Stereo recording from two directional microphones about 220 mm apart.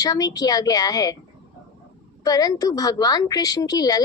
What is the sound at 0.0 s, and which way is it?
A woman's voice, 15° left (ahead or behind).